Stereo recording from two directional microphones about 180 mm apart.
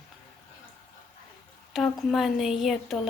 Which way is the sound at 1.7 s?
Centre (ahead or behind).